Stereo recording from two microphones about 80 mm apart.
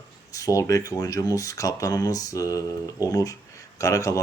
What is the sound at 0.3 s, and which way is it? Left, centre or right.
Speech, left.